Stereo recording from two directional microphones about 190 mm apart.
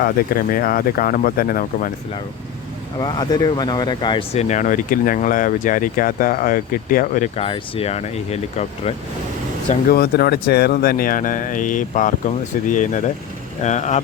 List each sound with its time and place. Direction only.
0.0 s speech: 50° left (ahead or behind)
3.0 s speech: 20° left (ahead or behind); by 7.3 s 45° left (ahead or behind)
7.3 s speech: 30° left (ahead or behind)
9.6 s speech: 55° left (ahead or behind); by 14.0 s 40° left (ahead or behind)